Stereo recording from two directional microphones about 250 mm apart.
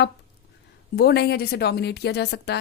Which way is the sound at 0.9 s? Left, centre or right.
Left.